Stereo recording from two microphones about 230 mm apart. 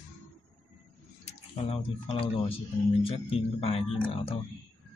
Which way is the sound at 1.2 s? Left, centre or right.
Left.